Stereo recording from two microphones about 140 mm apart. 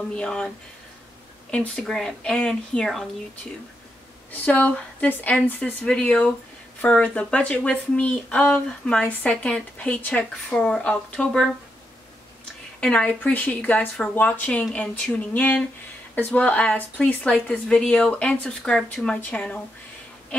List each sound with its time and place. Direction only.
0.1 s speech: 5° left (ahead or behind)
1.5 s speech: 5° left (ahead or behind)
4.3 s speech: 10° left (ahead or behind)
12.8 s speech: 10° left (ahead or behind)